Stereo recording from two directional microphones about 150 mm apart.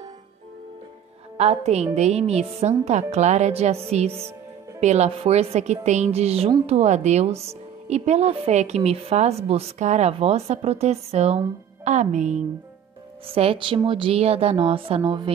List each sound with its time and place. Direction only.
1.4 s a woman's voice: 45° right (ahead or behind)
13.3 s speech: 40° right (ahead or behind)